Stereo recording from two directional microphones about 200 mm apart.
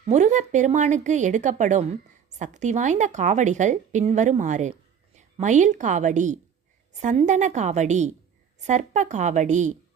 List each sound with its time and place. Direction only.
0.0 s a woman's voice: 35° right (ahead or behind)